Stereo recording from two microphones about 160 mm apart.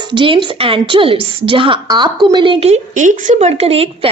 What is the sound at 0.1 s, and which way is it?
A woman's voice, 30° right (ahead or behind).